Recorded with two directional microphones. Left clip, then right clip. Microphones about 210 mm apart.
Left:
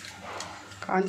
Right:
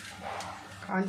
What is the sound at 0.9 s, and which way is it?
Speech, 50° left (ahead or behind).